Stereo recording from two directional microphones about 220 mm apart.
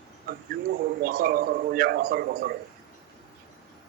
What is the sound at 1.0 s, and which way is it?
A man's voice, 40° right (ahead or behind).